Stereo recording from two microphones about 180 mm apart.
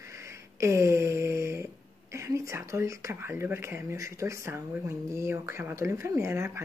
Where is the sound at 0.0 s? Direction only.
15° right (ahead or behind).